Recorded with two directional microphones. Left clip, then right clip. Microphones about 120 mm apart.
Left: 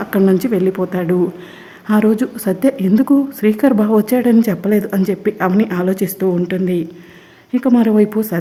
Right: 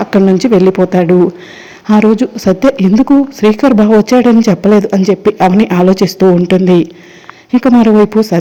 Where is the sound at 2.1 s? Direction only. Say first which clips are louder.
Right 7 dB; 15° right (ahead or behind).